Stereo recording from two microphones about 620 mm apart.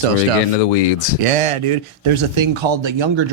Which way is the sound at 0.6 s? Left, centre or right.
Left.